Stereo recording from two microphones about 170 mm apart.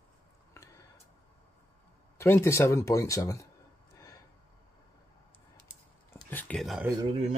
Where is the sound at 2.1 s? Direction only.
15° left (ahead or behind).